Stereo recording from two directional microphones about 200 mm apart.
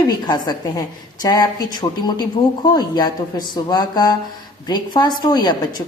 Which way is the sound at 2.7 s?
20° left (ahead or behind).